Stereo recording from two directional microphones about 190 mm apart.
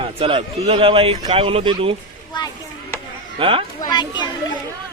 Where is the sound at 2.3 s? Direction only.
25° left (ahead or behind).